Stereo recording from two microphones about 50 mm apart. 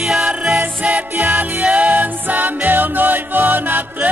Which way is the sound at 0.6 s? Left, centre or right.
Right.